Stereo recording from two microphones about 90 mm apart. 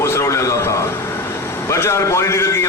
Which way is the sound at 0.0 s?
30° left (ahead or behind).